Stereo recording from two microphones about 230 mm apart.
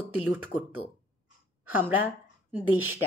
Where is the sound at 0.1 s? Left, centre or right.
Centre.